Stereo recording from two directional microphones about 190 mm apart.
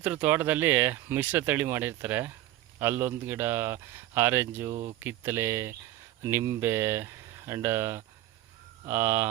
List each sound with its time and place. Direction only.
0.0 s speech: 10° right (ahead or behind)
4.7 s speech: 35° right (ahead or behind)
4.9 s speech: 10° right (ahead or behind)